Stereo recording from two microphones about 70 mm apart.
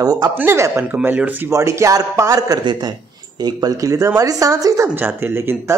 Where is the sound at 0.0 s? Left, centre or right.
Right.